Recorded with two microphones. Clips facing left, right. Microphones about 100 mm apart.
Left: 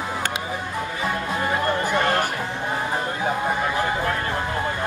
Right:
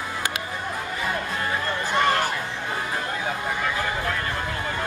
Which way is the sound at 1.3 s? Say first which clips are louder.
Left 4 dB; 20° left (ahead or behind).